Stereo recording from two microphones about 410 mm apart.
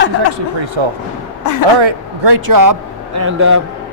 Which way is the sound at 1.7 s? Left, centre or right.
Right.